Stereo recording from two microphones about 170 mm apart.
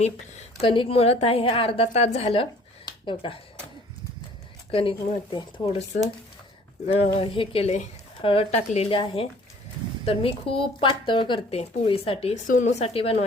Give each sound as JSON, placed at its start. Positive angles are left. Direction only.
{"t": 0.0, "sound": "a woman's voice", "side_deg": 35}
{"t": 4.7, "sound": "speech", "side_deg": 30}
{"t": 6.8, "sound": "speech", "side_deg": 35}
{"t": 10.5, "sound": "speech", "side_deg": 30}
{"t": 12.5, "sound": "speech", "side_deg": 50}
{"t": 12.8, "sound": "speech", "side_deg": 35}